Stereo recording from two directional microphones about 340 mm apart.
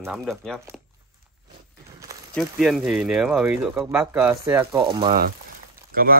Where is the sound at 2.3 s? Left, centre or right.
Centre.